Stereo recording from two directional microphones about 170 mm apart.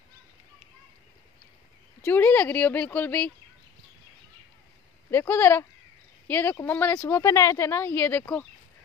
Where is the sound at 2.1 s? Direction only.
10° left (ahead or behind).